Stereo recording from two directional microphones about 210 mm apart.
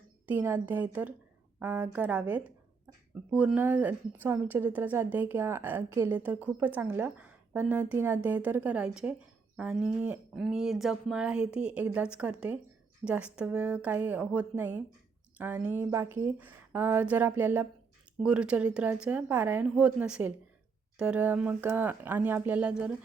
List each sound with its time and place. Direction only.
0.3 s speech: 10° right (ahead or behind)